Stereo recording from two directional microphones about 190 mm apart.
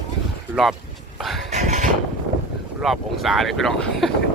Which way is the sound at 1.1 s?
Centre (ahead or behind).